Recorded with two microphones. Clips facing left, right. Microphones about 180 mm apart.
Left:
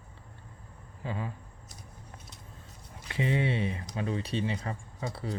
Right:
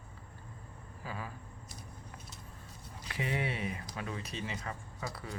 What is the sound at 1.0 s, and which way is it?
Speech, 25° left (ahead or behind).